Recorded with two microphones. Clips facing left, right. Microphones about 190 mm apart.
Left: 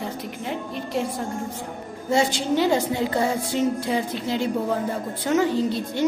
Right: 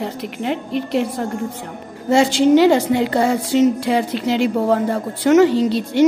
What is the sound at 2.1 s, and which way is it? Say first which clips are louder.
A woman's voice: right 9 dB; 80° right.